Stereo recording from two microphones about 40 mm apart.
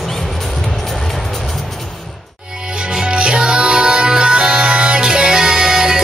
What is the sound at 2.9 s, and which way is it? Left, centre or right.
Music, right.